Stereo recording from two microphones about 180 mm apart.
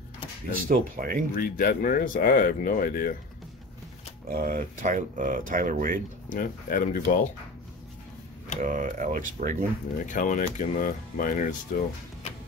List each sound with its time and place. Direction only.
0.7 s speech: 50° right (ahead or behind)
1.3 s speech: 50° left (ahead or behind)
4.3 s speech: 55° right (ahead or behind)
6.2 s speech: 50° left (ahead or behind)
8.5 s speech: 50° right (ahead or behind)
10.0 s speech: 45° left (ahead or behind)